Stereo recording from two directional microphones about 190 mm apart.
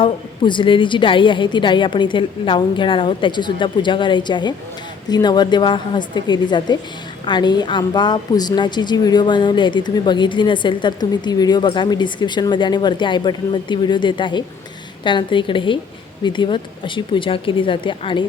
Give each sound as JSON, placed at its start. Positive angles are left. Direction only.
{"t": 0.0, "sound": "a woman's voice", "side_deg": 25}